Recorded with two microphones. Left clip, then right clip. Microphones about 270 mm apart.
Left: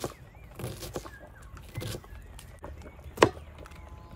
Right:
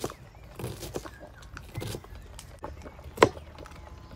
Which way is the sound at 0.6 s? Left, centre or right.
Centre.